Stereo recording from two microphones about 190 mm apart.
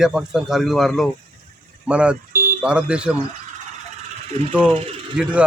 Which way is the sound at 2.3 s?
45° right (ahead or behind).